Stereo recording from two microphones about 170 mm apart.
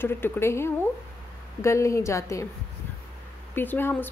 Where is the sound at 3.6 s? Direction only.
10° left (ahead or behind).